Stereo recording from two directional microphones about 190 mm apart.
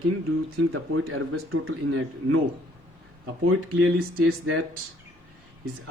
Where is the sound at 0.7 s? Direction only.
90° right.